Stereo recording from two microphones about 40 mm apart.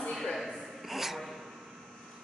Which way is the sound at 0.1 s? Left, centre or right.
Centre.